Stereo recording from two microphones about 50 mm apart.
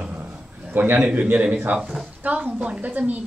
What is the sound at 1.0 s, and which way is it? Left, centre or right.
A man's voice, right.